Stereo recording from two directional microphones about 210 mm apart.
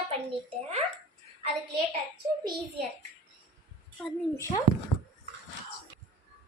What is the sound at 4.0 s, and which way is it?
Speech, 15° left (ahead or behind).